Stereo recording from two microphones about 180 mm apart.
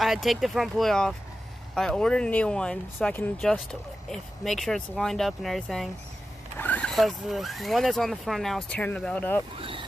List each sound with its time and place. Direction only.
0.0 s speech: centre (ahead or behind)
9.6 s vehicle: 30° right (ahead or behind)